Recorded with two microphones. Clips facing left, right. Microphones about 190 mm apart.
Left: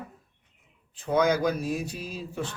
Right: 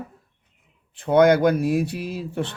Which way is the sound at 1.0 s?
65° right (ahead or behind).